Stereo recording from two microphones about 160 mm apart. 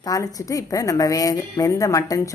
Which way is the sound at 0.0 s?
20° left (ahead or behind).